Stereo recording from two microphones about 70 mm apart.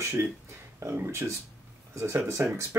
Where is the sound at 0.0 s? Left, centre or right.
Right.